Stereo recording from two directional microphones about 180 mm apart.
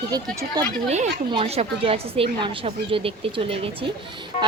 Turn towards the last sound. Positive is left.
turn(degrees=-30)  # may be behind; listen again after turning